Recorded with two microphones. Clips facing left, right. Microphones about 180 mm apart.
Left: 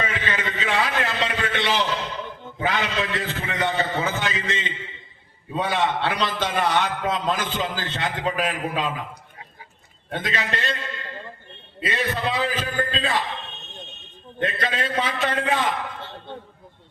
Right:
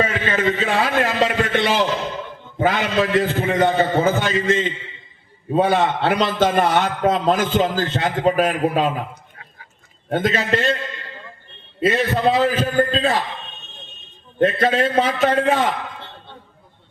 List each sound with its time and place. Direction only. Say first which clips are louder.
0.0 s a man's voice: right 8 dB; 45° right (ahead or behind)
10.1 s a man's voice: right 8 dB; 50° right (ahead or behind)
11.9 s a man's voice: right 8 dB; 50° right (ahead or behind)
14.3 s a man's voice: right 9 dB; 50° right (ahead or behind)